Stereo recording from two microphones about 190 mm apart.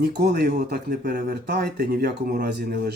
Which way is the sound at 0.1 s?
60° right (ahead or behind).